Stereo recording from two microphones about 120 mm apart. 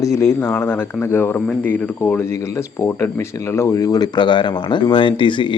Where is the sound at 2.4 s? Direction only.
25° left (ahead or behind).